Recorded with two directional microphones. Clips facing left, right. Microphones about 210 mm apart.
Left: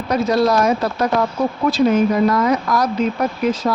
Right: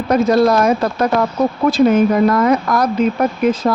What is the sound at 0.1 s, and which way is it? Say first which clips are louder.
Speech: right 4 dB; 50° right (ahead or behind).